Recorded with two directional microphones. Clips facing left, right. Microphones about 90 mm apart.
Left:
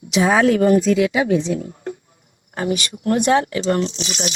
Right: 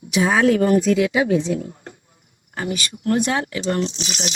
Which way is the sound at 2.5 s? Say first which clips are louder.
Left 4 dB; 30° left (ahead or behind).